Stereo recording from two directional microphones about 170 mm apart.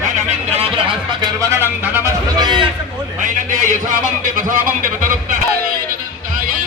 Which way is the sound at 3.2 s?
45° right (ahead or behind).